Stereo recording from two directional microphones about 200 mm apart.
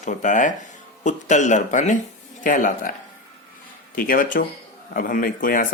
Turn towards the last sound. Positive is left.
turn(degrees=45)  # may be behind; listen again after turning